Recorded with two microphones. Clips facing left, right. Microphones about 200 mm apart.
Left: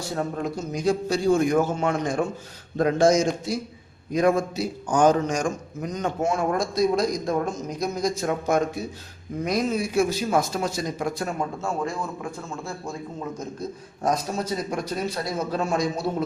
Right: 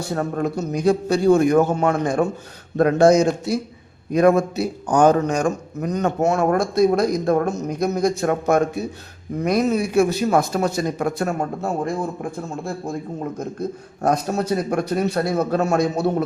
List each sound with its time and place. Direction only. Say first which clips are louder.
0.1 s a man's voice: right 5 dB; 55° right (ahead or behind)
11.3 s a man's voice: right 4 dB; 35° right (ahead or behind)
12.6 s a man's voice: right 6 dB; 55° right (ahead or behind)